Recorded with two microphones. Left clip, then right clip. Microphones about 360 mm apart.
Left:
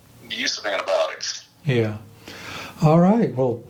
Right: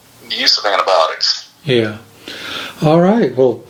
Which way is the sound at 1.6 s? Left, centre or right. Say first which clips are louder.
Right 8 dB; left.